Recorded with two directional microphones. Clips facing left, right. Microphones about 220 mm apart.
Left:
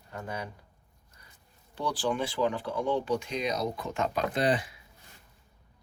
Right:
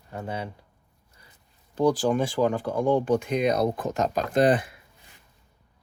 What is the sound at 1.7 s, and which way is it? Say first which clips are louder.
Speech: right 8 dB; 45° right (ahead or behind).